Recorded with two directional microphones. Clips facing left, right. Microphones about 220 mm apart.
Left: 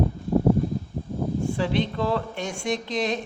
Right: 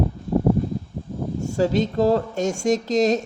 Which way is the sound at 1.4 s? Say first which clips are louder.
Right 6 dB; 45° right (ahead or behind).